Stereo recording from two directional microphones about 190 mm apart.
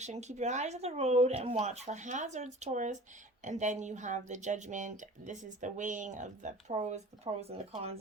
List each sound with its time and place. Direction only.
0.0 s speech: 35° right (ahead or behind)